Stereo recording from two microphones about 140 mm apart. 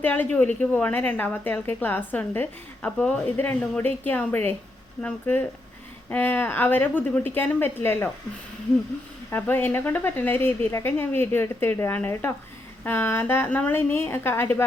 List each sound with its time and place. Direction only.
0.0 s a woman's voice: 15° left (ahead or behind)
9.3 s a woman's voice: 15° left (ahead or behind)